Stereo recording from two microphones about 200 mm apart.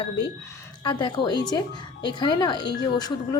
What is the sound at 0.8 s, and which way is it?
A woman's voice, 25° left (ahead or behind).